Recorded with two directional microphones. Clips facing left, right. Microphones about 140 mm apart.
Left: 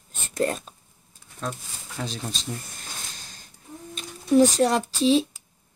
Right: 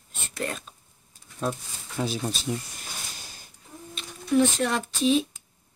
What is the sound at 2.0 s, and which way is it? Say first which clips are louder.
Speech: right 4 dB; 10° right (ahead or behind).